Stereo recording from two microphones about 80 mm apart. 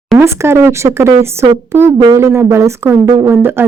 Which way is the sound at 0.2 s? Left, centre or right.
Right.